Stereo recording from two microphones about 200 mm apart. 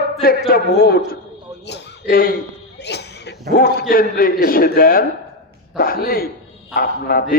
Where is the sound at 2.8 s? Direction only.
55° left (ahead or behind).